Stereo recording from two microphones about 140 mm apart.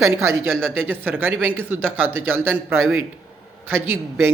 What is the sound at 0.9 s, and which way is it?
Speech, 15° right (ahead or behind).